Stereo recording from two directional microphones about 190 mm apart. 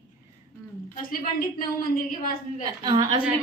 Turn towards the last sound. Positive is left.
turn(degrees=-25)  # may be behind; listen again after turning